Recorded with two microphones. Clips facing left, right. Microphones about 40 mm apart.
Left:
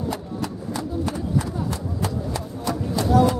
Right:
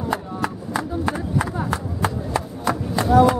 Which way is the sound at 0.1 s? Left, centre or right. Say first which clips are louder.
Right 4 dB; right.